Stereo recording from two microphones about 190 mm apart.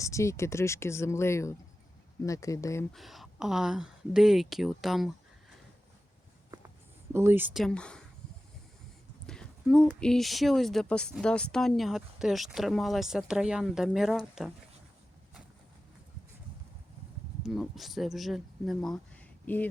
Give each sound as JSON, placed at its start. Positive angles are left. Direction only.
{"t": 0.0, "sound": "speech", "side_deg": 15}
{"t": 2.9, "sound": "speech", "side_deg": 0}
{"t": 7.1, "sound": "speech", "side_deg": -10}
{"t": 9.2, "sound": "speech", "side_deg": 5}
{"t": 17.4, "sound": "speech", "side_deg": 0}